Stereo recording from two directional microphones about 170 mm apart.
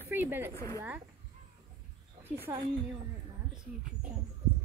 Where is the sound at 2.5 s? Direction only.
20° right (ahead or behind).